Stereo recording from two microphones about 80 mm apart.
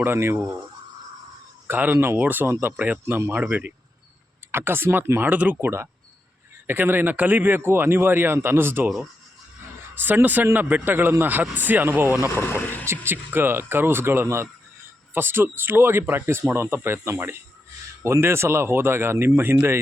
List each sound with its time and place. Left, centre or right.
0.0 s speech: right
1.6 s speech: right
4.5 s speech: right
9.9 s speech: right
12.4 s speech: left
12.8 s speech: right